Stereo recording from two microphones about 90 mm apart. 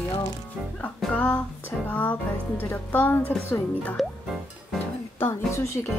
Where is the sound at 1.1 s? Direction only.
20° left (ahead or behind).